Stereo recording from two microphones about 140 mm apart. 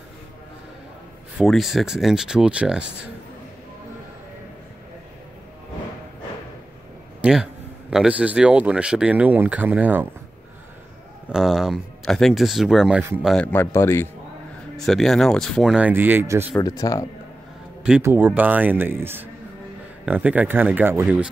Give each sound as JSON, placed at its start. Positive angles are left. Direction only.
{"t": 1.4, "sound": "speech", "side_deg": 0}
{"t": 7.2, "sound": "a sound", "side_deg": -5}
{"t": 7.9, "sound": "speech", "side_deg": -5}
{"t": 11.2, "sound": "speech", "side_deg": -5}
{"t": 13.3, "sound": "speech", "side_deg": 10}
{"t": 14.8, "sound": "speech", "side_deg": 0}
{"t": 16.5, "sound": "speech", "side_deg": 25}
{"t": 18.0, "sound": "speech", "side_deg": -15}